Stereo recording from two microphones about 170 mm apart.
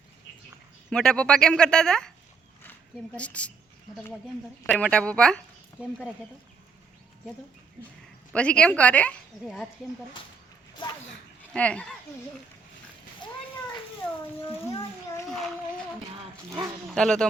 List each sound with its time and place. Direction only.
0.9 s speech: 5° left (ahead or behind)
3.2 s speech: 5° left (ahead or behind)
4.6 s speech: 10° left (ahead or behind)
8.3 s speech: 5° left (ahead or behind)
11.5 s speech: 5° left (ahead or behind)
14.7 s a child's voice: 25° left (ahead or behind)
15.3 s speech: centre (ahead or behind)
16.9 s speech: 5° left (ahead or behind)